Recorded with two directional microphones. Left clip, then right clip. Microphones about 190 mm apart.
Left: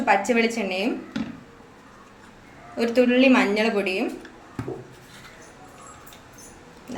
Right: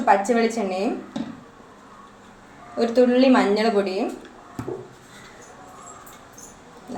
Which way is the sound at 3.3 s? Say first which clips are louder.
Right 2 dB; 10° left (ahead or behind).